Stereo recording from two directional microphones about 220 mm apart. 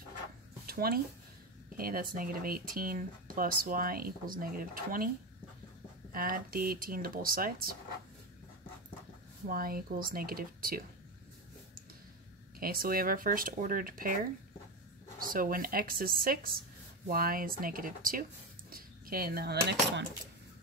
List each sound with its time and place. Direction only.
0.7 s speech: 45° right (ahead or behind)
6.1 s speech: 40° right (ahead or behind)
9.5 s speech: 40° right (ahead or behind)
12.5 s speech: 40° right (ahead or behind)